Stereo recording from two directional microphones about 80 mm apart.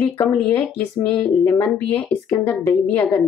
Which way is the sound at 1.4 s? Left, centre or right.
Left.